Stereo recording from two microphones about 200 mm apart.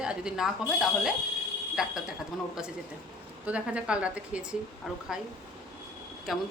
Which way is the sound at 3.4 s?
5° right (ahead or behind).